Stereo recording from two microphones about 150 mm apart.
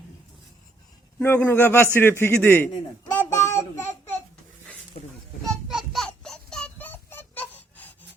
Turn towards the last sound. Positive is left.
turn(degrees=10)  # may be behind; listen again after turning